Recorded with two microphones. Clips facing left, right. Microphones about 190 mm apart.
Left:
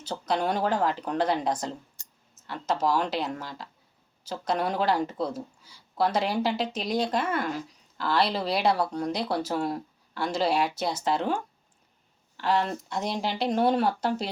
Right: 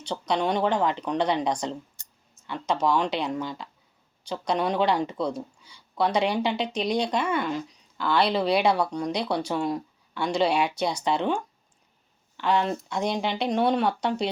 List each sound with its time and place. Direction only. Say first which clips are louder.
0.0 s speech: right 2 dB; 5° left (ahead or behind)